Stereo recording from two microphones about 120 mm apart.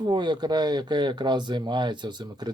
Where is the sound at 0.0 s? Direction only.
40° right (ahead or behind).